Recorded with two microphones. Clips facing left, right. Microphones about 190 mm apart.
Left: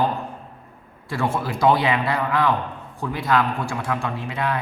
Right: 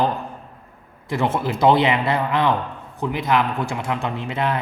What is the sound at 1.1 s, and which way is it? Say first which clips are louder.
A man's voice: right 3 dB; 20° right (ahead or behind).